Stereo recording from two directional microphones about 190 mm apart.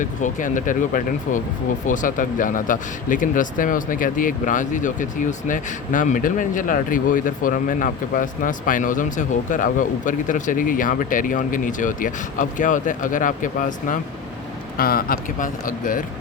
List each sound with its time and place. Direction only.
0.0 s speech: 40° left (ahead or behind)